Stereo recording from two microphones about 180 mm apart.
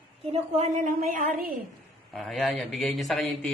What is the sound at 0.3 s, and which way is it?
Speech, 40° right (ahead or behind).